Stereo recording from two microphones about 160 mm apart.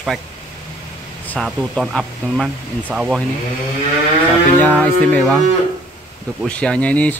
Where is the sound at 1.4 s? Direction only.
5° right (ahead or behind).